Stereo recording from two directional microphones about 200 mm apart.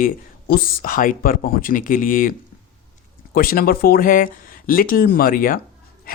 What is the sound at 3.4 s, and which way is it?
Speech, 45° left (ahead or behind).